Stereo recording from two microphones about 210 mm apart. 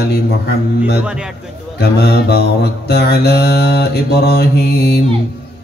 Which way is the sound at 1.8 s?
50° left (ahead or behind).